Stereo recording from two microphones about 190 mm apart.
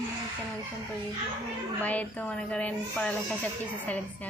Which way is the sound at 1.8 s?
5° left (ahead or behind).